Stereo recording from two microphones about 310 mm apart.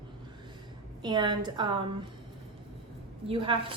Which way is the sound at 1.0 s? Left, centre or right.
Centre.